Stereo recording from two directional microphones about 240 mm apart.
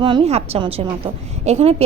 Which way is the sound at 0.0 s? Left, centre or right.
Right.